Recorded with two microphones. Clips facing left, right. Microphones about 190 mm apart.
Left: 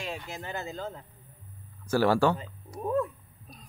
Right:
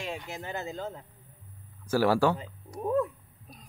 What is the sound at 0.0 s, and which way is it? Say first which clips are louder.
Speech: even; 20° right (ahead or behind).